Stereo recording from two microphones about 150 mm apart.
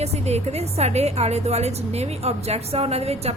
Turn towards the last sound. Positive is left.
turn(degrees=-45)  # may be behind; listen again after turning